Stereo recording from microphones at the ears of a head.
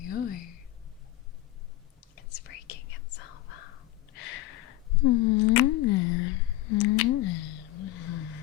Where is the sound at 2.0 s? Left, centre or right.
Left.